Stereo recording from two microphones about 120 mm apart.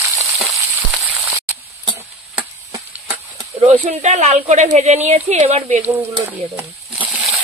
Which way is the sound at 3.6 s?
80° right.